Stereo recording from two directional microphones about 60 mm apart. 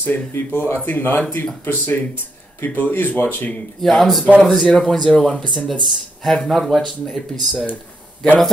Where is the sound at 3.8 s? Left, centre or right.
Centre.